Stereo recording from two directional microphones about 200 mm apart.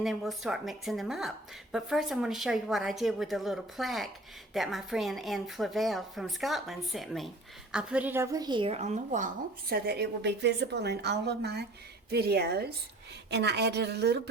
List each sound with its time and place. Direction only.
0.0 s a woman's voice: centre (ahead or behind); by 14.2 s 55° right (ahead or behind)